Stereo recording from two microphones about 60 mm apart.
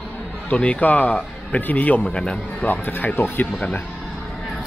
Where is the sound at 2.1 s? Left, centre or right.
Centre.